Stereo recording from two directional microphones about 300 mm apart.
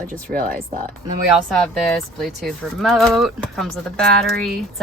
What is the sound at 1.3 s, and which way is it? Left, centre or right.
A woman's voice, centre.